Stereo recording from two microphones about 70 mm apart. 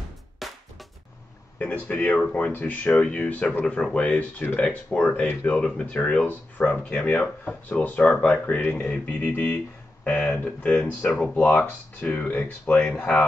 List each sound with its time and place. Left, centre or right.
0.4 s music: centre
1.6 s speech: left
2.9 s speech: centre
10.0 s speech: centre